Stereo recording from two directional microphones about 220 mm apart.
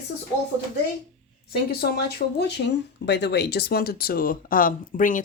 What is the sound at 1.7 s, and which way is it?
Speech, 45° left (ahead or behind).